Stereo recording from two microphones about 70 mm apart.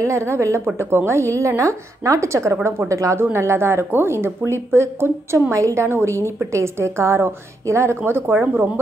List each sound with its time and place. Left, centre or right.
0.0 s a woman's voice: right
3.3 s a woman's voice: right